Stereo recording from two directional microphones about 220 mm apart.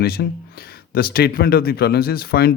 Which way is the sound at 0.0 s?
45° left (ahead or behind).